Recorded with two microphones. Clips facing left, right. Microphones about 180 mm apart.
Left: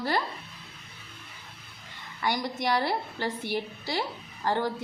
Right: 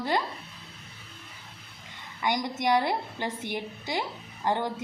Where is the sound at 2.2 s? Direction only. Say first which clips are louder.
Right 1 dB; 20° right (ahead or behind).